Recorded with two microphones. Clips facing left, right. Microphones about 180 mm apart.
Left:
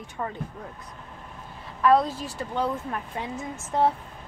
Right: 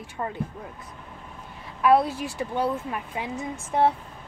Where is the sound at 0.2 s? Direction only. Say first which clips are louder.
Right 1 dB; 5° right (ahead or behind).